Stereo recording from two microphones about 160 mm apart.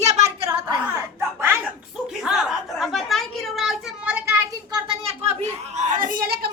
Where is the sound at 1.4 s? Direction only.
10° right (ahead or behind).